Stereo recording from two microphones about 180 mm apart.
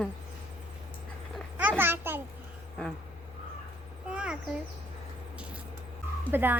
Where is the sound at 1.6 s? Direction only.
10° right (ahead or behind).